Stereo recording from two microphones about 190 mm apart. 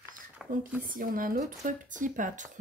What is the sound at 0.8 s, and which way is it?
Speech, 45° right (ahead or behind).